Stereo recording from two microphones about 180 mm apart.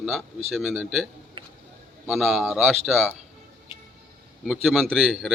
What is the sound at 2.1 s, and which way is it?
Speech, centre (ahead or behind).